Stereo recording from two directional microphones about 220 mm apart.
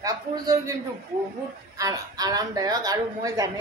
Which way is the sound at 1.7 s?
15° right (ahead or behind).